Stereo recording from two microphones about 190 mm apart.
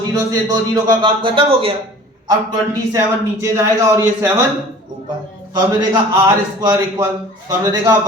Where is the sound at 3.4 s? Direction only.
15° right (ahead or behind).